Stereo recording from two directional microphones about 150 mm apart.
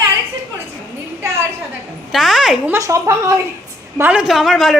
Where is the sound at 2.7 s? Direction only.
20° right (ahead or behind).